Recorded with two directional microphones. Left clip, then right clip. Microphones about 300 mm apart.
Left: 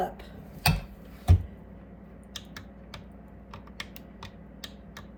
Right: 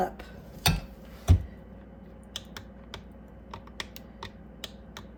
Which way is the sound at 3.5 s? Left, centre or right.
Centre.